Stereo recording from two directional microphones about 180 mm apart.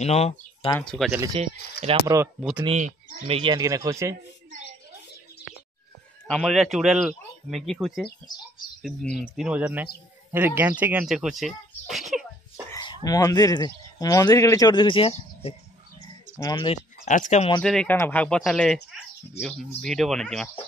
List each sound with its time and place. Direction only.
0.0 s speech: 35° left (ahead or behind)
0.8 s speech: centre (ahead or behind)
1.3 s speech: 35° right (ahead or behind)
3.3 s speech: 25° right (ahead or behind)
6.2 s speech: 5° left (ahead or behind)
9.4 s speech: 10° right (ahead or behind)
12.8 s speech: 20° left (ahead or behind)
16.7 s speech: 45° left (ahead or behind)
17.6 s speech: 5° left (ahead or behind)